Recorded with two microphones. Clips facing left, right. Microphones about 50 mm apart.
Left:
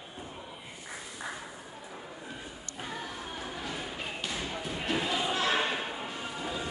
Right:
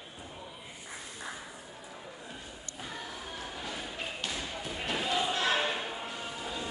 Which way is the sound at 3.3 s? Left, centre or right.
Centre.